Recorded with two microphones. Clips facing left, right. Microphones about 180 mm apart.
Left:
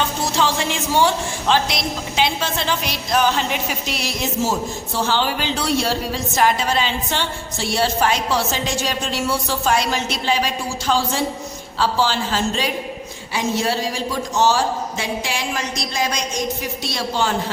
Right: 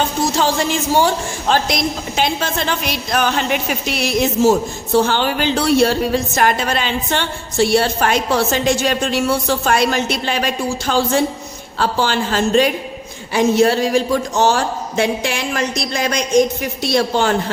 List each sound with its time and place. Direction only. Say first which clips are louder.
0.3 s a man's voice: right 1 dB; 40° right (ahead or behind); by 17.3 s 60° right (ahead or behind)